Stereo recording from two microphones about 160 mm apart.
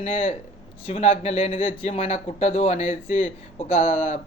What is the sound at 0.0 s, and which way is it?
Speech, 35° left (ahead or behind).